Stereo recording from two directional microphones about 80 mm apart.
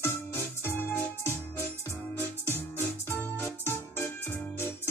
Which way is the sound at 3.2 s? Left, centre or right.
Left.